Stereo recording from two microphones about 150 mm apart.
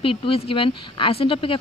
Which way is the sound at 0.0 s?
40° left (ahead or behind).